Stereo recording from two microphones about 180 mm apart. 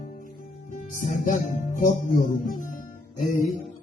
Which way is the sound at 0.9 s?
45° left (ahead or behind).